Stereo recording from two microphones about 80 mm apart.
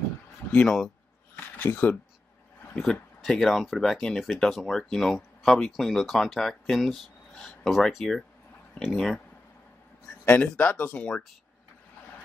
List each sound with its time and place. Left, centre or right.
0.5 s speech: centre
0.7 s a sound: centre
1.6 s speech: left
2.7 s speech: centre
10.2 s speech: centre